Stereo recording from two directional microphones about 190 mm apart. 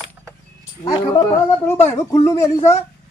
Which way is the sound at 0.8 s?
20° left (ahead or behind).